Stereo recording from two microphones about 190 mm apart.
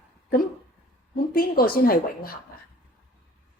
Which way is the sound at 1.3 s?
50° left (ahead or behind).